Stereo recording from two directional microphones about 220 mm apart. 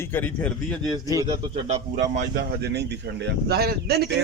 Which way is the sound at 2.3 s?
45° right (ahead or behind).